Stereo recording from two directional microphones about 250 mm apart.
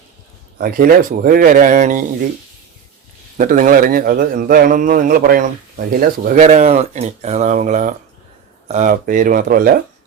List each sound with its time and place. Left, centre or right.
0.6 s a man's voice: right
3.3 s a man's voice: right